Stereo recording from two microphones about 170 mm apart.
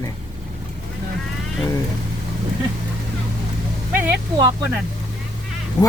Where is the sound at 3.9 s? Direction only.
10° right (ahead or behind).